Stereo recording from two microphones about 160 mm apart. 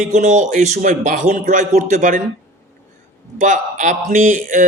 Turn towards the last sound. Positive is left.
turn(degrees=-55)  # may be behind; listen again after turning